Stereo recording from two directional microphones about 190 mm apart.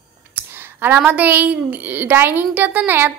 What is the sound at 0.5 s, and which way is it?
A woman's voice, 10° right (ahead or behind).